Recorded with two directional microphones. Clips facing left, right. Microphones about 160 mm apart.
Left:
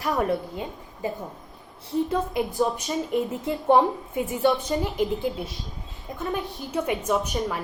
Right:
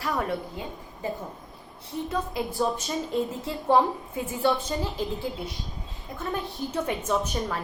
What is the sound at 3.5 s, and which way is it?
A woman's voice, 20° left (ahead or behind).